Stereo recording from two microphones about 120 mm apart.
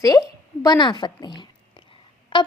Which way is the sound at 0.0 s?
30° left (ahead or behind).